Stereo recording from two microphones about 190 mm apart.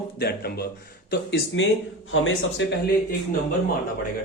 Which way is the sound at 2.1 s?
90° left.